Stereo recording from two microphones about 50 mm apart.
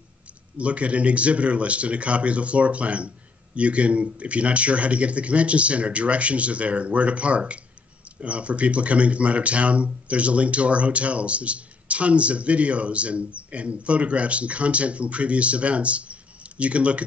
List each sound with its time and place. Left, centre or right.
0.6 s speech: right